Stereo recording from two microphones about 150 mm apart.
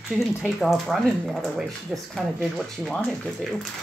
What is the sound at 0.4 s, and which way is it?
Speech, centre (ahead or behind).